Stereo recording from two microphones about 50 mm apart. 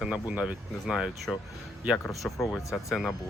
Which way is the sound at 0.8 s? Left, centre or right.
Centre.